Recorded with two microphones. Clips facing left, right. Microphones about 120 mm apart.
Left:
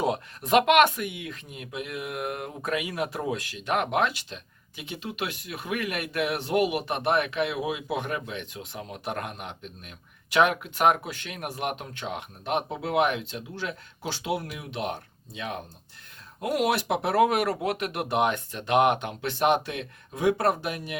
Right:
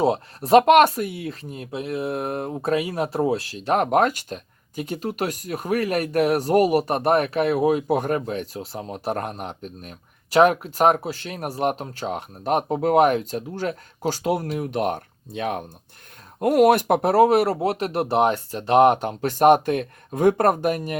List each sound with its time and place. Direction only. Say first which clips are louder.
0.0 s speech: right 6 dB; 35° right (ahead or behind)